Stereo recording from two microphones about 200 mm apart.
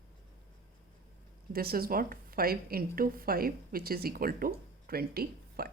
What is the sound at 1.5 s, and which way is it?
Speech, 50° right (ahead or behind).